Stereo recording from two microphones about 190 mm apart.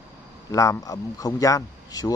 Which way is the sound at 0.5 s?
15° left (ahead or behind).